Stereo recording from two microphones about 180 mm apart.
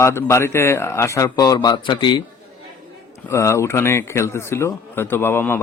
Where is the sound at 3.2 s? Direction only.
15° left (ahead or behind).